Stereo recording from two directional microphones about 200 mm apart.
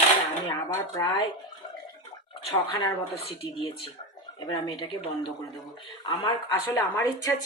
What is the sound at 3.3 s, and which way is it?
Speech, 30° left (ahead or behind).